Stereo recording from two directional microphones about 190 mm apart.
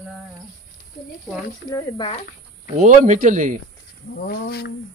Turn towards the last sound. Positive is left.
turn(degrees=55)  # may be behind; listen again after turning